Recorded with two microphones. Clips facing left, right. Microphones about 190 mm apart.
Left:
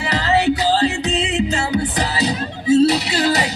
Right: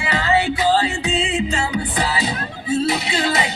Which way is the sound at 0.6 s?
40° left (ahead or behind).